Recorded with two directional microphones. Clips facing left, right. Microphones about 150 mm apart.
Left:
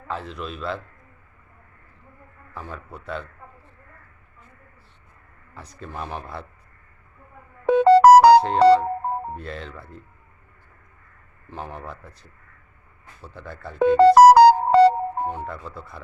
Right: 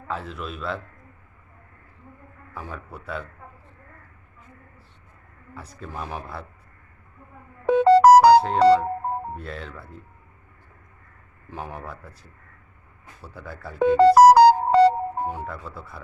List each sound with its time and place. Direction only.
0.1 s a man's voice: 5° right (ahead or behind)
2.6 s a man's voice: 10° right (ahead or behind)
5.5 s a man's voice: 5° right (ahead or behind)
7.7 s music: 65° left (ahead or behind)
9.3 s a man's voice: centre (ahead or behind)
11.5 s a man's voice: 10° right (ahead or behind)
13.2 s a man's voice: 5° right (ahead or behind)
13.8 s music: 65° left (ahead or behind)
15.3 s a man's voice: 5° right (ahead or behind)